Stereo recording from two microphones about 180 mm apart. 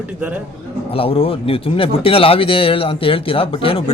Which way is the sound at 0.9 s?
30° left (ahead or behind).